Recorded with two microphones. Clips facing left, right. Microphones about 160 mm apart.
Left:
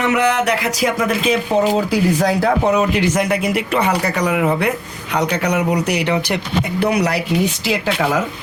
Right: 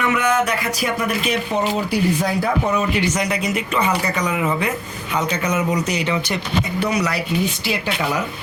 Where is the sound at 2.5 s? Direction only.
65° left (ahead or behind).